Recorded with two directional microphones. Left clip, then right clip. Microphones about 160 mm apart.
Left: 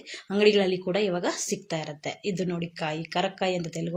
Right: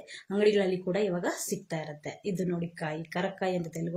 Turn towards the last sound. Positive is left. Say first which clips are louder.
# left 4 dB
turn(degrees=15)  # may be behind; listen again after turning